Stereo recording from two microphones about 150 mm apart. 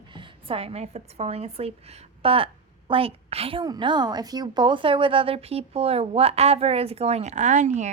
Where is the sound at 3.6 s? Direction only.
30° right (ahead or behind).